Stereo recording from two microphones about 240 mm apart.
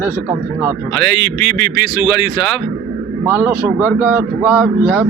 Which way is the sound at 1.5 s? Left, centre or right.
Right.